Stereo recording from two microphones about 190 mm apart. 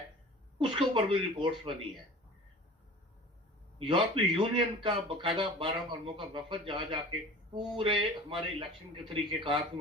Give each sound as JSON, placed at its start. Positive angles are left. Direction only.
{"t": 0.6, "sound": "speech", "side_deg": -25}
{"t": 3.8, "sound": "speech", "side_deg": -25}